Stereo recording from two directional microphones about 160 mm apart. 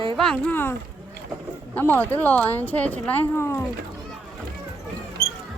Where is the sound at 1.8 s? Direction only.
10° left (ahead or behind).